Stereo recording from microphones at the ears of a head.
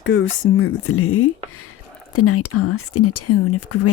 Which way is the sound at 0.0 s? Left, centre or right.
Left.